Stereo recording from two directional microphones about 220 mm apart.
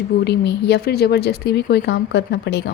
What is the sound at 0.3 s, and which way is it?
A woman's voice, 50° left (ahead or behind).